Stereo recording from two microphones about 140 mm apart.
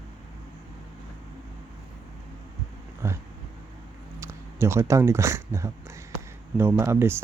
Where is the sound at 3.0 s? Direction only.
20° right (ahead or behind).